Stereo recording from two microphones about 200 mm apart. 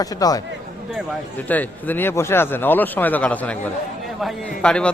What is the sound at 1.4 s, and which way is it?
A man's voice, 10° left (ahead or behind).